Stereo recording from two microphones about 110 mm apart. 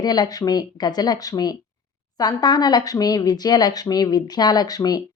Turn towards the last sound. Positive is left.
turn(degrees=35)  # may be behind; listen again after turning